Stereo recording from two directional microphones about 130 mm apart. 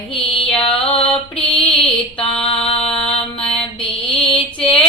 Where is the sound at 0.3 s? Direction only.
45° left (ahead or behind).